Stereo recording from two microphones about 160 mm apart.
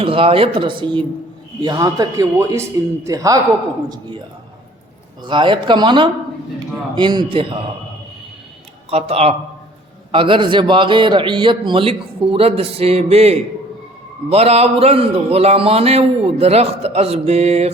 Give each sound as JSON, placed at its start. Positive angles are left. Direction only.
{"t": 0.0, "sound": "a man's voice", "side_deg": -35}
{"t": 5.2, "sound": "a man's voice", "side_deg": -30}
{"t": 8.9, "sound": "a man's voice", "side_deg": -40}